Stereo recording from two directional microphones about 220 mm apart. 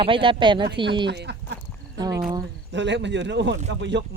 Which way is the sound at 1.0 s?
50° right (ahead or behind).